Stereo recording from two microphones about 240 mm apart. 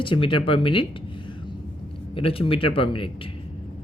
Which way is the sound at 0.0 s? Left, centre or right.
Left.